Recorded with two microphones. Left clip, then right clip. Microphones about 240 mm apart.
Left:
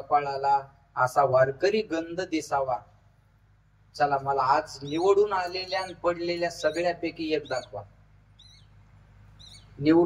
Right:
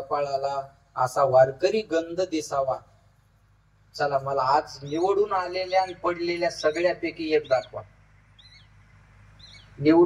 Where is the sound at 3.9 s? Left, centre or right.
Centre.